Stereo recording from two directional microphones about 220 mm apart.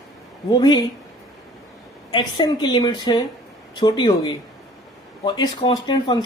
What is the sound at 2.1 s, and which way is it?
Speech, 20° left (ahead or behind).